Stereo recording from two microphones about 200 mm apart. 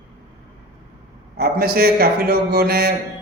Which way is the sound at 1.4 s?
50° right (ahead or behind).